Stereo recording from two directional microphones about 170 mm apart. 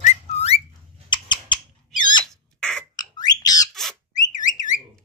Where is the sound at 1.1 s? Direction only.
25° left (ahead or behind).